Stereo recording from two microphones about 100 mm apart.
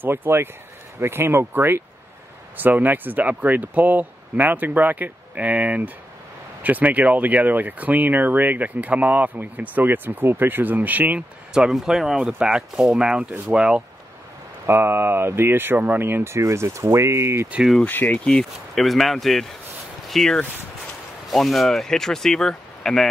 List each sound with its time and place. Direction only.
0.0 s speech: 20° right (ahead or behind)
14.7 s speech: 20° right (ahead or behind)
17.8 s speech: 15° left (ahead or behind)